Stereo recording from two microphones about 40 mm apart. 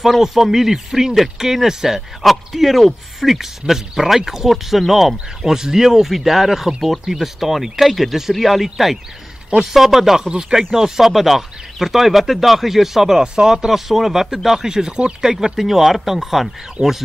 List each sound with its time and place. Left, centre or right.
0.0 s speech: centre; by 15.1 s right
15.2 s speech: centre